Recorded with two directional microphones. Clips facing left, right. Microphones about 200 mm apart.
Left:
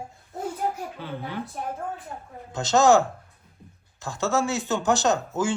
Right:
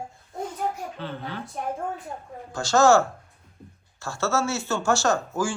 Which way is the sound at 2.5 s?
20° left (ahead or behind).